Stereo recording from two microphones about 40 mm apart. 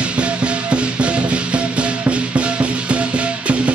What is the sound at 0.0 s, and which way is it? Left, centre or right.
Music, right.